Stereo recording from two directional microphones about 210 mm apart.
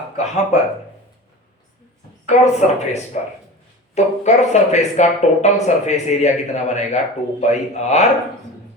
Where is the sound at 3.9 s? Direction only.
35° left (ahead or behind).